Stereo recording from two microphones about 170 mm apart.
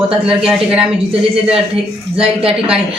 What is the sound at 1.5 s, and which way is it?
Speech, 35° right (ahead or behind).